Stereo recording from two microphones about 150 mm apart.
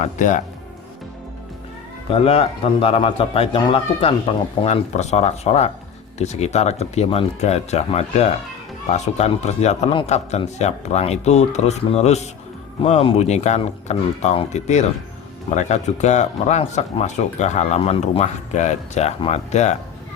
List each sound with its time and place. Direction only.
0.0 s speech: 55° left (ahead or behind)
2.0 s a man's voice: 40° left (ahead or behind)